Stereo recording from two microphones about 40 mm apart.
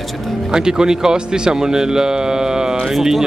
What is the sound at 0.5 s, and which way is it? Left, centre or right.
A man's voice, centre.